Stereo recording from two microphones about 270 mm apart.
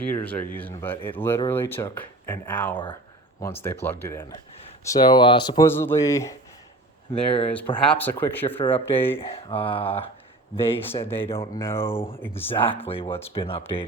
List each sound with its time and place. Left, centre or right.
0.1 s speech: centre
2.7 s speech: centre
7.8 s speech: centre
9.2 s speech: centre
10.8 s speech: centre
12.8 s speech: centre